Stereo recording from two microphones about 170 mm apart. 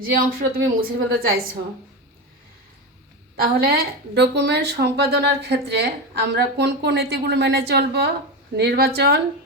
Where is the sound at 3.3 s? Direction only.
65° right (ahead or behind).